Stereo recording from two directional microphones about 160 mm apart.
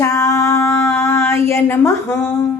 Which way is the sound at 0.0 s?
20° left (ahead or behind).